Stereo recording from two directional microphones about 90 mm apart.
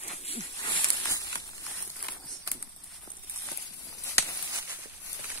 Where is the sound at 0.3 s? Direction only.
75° left (ahead or behind); by 1.0 s 60° left (ahead or behind).